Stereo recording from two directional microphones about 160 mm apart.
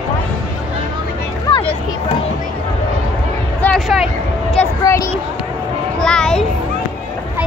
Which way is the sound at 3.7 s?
Centre (ahead or behind).